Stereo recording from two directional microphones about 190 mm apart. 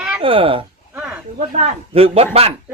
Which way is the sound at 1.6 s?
30° right (ahead or behind).